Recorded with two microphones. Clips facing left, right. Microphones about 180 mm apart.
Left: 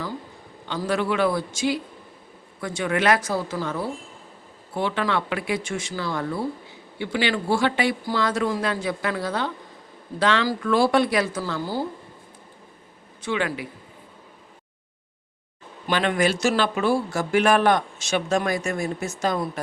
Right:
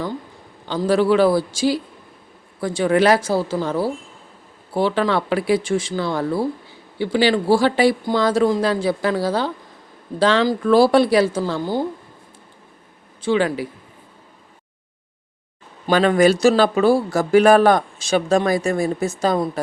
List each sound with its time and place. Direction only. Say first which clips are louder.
0.6 s speech: right 7 dB; 35° right (ahead or behind)
11.6 s speech: right 4 dB; 20° right (ahead or behind)
13.2 s speech: right 7 dB; 35° right (ahead or behind)
15.9 s speech: right 7 dB; 40° right (ahead or behind)